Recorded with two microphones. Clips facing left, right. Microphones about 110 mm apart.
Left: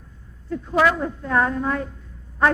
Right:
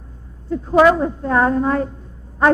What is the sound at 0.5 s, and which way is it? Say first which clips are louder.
A man's voice: right 7 dB; 30° right (ahead or behind).